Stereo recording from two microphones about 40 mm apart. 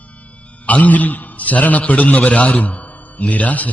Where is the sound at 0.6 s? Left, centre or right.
Left.